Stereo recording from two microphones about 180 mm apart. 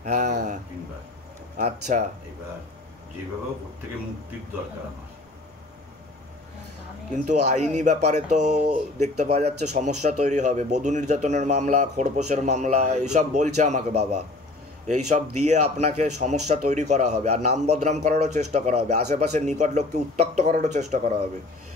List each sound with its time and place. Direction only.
0.0 s speech: 45° right (ahead or behind)
1.6 s speech: 40° right (ahead or behind)
7.1 s speech: 40° right (ahead or behind)
15.0 s speech: 40° right (ahead or behind)